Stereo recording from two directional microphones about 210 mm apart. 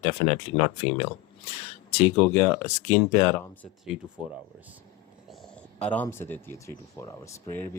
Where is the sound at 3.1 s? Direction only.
15° left (ahead or behind).